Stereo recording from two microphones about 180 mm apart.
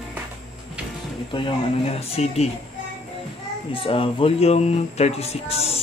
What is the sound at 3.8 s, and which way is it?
Speech, 30° left (ahead or behind).